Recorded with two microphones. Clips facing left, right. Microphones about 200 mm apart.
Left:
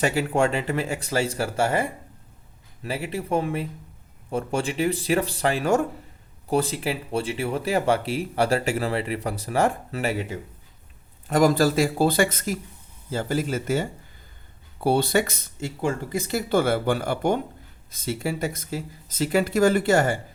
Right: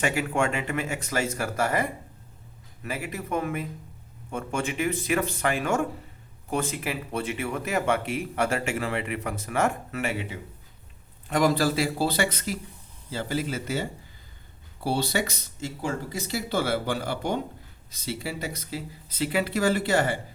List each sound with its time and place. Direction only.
0.0 s speech: 35° left (ahead or behind)
14.8 s speech: 50° left (ahead or behind)